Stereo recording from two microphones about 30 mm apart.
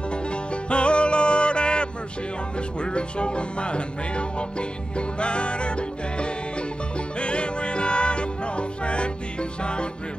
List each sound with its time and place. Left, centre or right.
0.7 s music: left